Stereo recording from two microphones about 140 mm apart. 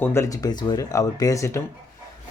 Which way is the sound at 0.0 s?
20° left (ahead or behind).